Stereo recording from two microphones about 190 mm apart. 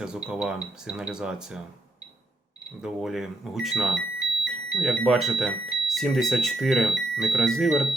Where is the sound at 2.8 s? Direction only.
Centre (ahead or behind).